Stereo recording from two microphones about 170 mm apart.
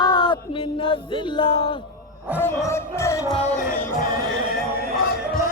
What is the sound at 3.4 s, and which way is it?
Music, 50° left (ahead or behind).